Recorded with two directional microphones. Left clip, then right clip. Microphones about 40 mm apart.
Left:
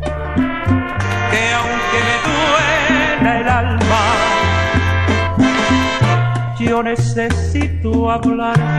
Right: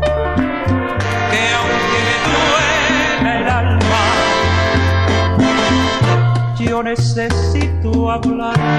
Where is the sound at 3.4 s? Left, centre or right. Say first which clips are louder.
Left 1 dB; left.